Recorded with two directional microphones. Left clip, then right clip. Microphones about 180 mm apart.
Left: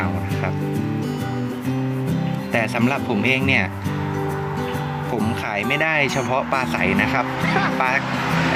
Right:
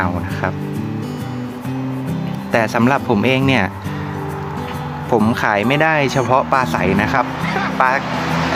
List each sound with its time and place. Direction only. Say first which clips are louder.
2.5 s speech: right 6 dB; 10° right (ahead or behind)
5.1 s speech: right 10 dB; 20° right (ahead or behind); by 7.9 s 5° right (ahead or behind)